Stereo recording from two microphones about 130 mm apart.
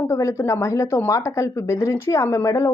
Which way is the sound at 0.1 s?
25° left (ahead or behind).